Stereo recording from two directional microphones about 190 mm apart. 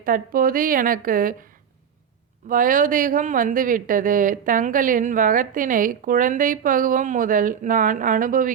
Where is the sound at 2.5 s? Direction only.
45° right (ahead or behind).